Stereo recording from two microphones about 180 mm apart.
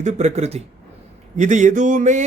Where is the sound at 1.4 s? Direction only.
40° right (ahead or behind).